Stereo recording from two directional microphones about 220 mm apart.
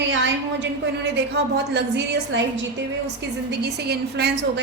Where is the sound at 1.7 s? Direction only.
50° right (ahead or behind).